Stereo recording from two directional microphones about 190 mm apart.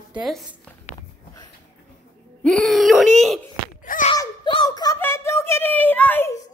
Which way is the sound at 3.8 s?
45° left (ahead or behind).